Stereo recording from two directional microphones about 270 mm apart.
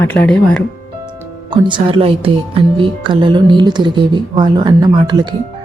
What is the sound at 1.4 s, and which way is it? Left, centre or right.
Speech, centre.